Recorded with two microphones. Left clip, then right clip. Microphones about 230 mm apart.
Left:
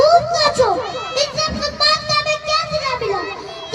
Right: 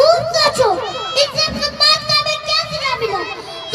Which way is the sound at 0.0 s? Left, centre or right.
Right.